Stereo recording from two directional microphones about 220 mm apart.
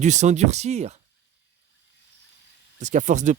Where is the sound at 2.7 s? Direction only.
35° right (ahead or behind).